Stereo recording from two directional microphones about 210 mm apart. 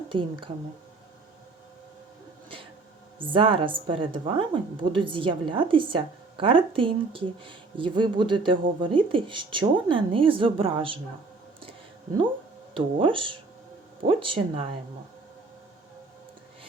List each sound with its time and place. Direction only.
0.1 s a woman's voice: 25° right (ahead or behind)
3.2 s a woman's voice: 25° right (ahead or behind)
12.7 s a woman's voice: 25° right (ahead or behind)